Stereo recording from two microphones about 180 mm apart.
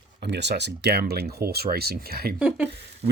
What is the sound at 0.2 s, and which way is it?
Speech, 70° right (ahead or behind).